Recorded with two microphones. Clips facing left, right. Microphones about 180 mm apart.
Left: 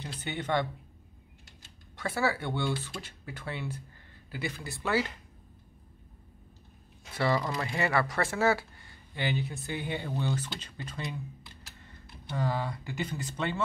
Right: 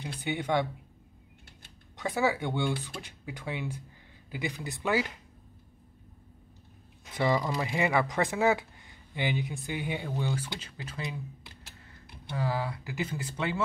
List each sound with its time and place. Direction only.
0.2 s speech: 10° right (ahead or behind)
2.0 s speech: 15° right (ahead or behind)
7.1 s speech: 15° right (ahead or behind)
12.3 s speech: 5° right (ahead or behind)